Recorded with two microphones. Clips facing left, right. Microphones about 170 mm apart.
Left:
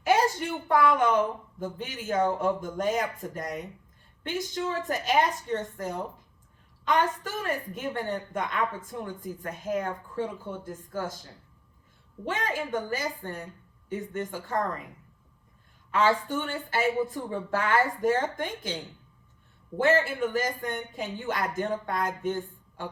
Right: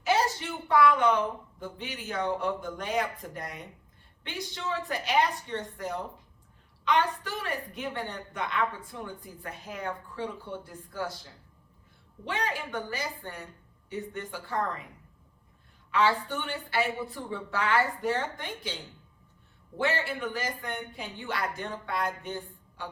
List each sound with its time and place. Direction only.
0.0 s a sound: 50° left (ahead or behind)
1.5 s a woman's voice: 45° left (ahead or behind)
6.8 s a woman's voice: 45° left (ahead or behind)
12.2 s a woman's voice: 45° left (ahead or behind)
15.9 s a woman's voice: 45° left (ahead or behind)
19.8 s a woman's voice: 45° left (ahead or behind)